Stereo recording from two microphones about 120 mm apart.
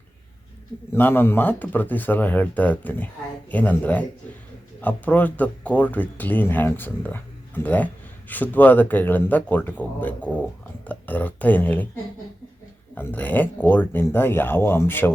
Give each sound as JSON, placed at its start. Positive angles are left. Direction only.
{"t": 0.9, "sound": "speech", "side_deg": 20}
{"t": 12.9, "sound": "speech", "side_deg": 15}